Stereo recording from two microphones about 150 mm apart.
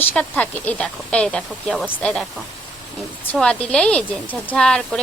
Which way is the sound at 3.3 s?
5° left (ahead or behind).